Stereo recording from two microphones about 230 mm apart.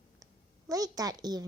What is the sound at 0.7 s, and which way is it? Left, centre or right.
Speech, centre.